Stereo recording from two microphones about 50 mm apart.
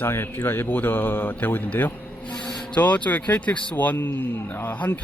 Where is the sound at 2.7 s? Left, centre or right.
Left.